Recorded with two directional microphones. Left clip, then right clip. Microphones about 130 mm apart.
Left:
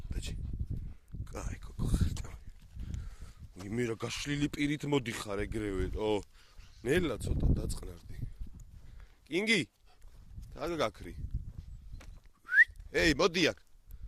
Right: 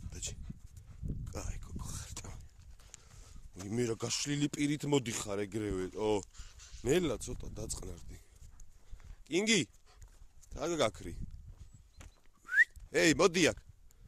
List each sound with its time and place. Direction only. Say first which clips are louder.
0.1 s dog: right 1 dB; 15° right (ahead or behind)
3.7 s speech: even; 25° right (ahead or behind); by 11.2 s 45° right (ahead or behind)
12.5 s whistling: left 3 dB; 40° right (ahead or behind)